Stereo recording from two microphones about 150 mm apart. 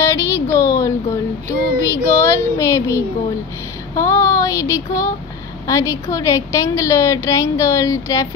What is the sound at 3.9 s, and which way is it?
A woman's voice, 20° left (ahead or behind).